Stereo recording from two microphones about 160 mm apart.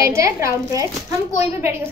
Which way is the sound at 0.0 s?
20° right (ahead or behind).